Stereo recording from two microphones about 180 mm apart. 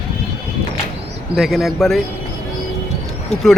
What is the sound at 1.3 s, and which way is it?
Speech, centre (ahead or behind).